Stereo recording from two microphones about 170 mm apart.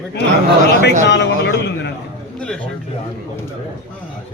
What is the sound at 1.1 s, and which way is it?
Speech, 90° left.